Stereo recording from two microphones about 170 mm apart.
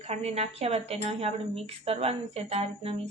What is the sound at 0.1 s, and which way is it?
Speech, 40° right (ahead or behind).